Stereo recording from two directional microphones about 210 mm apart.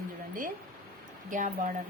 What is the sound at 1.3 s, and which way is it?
Speech, 35° right (ahead or behind).